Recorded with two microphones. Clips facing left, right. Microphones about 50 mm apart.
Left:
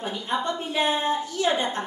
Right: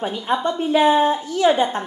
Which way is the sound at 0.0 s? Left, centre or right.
Right.